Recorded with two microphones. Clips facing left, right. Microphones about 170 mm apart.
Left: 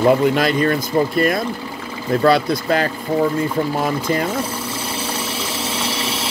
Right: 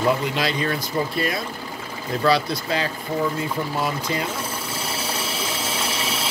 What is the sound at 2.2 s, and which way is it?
Speech, 50° left (ahead or behind).